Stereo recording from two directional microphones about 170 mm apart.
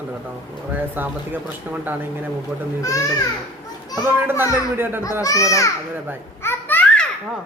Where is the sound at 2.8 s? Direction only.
20° left (ahead or behind).